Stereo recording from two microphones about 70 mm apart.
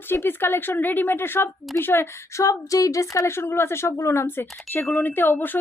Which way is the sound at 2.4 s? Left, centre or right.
Left.